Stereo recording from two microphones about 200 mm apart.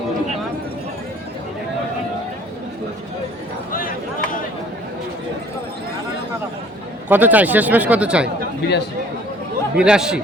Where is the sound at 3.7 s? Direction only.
45° left (ahead or behind).